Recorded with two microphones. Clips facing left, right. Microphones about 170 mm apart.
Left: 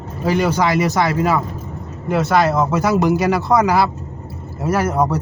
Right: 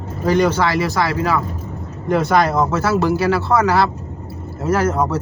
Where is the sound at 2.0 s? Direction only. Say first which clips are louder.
Even; centre (ahead or behind).